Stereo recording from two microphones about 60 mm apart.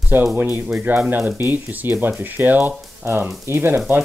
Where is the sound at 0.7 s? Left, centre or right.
Right.